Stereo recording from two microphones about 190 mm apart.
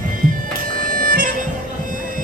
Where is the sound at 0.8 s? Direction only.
45° right (ahead or behind).